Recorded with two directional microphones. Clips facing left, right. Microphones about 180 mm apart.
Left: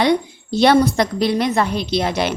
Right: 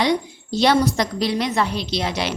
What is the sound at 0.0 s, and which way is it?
A woman's voice, 55° left (ahead or behind).